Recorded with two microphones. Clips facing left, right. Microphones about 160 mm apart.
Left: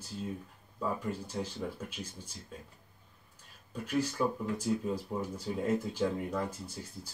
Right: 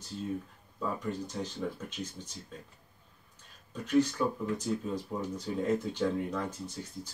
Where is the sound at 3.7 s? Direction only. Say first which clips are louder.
Right 5 dB; 10° left (ahead or behind).